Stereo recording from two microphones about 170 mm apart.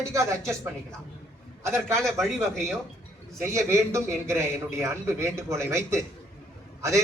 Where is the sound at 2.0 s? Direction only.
5° left (ahead or behind).